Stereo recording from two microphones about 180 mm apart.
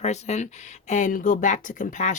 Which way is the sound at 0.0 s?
40° left (ahead or behind).